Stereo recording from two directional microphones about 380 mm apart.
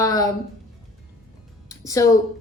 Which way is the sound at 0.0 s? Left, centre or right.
Centre.